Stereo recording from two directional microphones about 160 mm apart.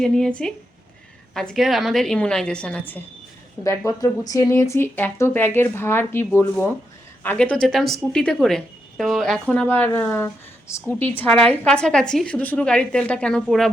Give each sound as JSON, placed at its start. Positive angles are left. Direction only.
{"t": 0.0, "sound": "speech", "side_deg": 5}
{"t": 3.6, "sound": "speech", "side_deg": 20}